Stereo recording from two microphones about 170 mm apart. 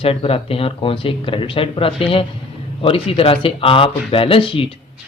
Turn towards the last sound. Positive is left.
turn(degrees=30)  # may be behind; listen again after turning